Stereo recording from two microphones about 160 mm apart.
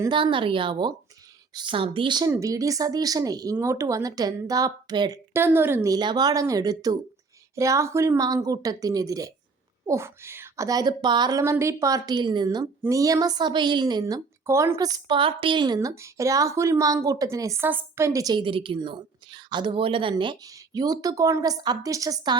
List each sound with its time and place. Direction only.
0.0 s a woman's voice: 30° right (ahead or behind)